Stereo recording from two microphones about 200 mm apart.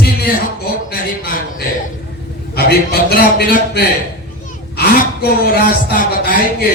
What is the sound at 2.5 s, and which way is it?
Speech, 50° left (ahead or behind).